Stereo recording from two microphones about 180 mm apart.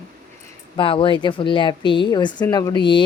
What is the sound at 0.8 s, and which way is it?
A woman's voice, 30° left (ahead or behind).